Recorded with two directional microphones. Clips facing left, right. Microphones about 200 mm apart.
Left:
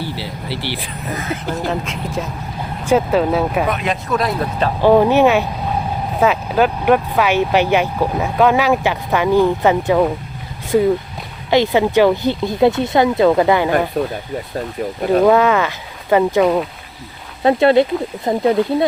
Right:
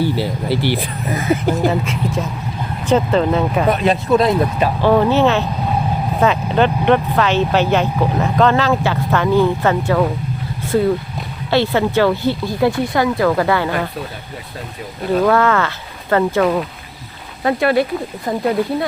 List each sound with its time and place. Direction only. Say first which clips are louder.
0.2 s speech: right 7 dB; 50° right (ahead or behind)
1.5 s speech: right 5 dB; 5° right (ahead or behind)
3.7 s speech: right 5 dB; 35° right (ahead or behind)
4.8 s speech: left 3 dB; 15° left (ahead or behind)
15.2 s speech: left 2 dB; 15° left (ahead or behind)
17.4 s speech: left 4 dB; 25° left (ahead or behind)